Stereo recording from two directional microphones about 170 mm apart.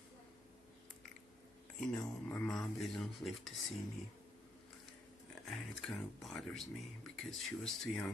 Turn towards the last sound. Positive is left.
turn(degrees=5)  # may be behind; listen again after turning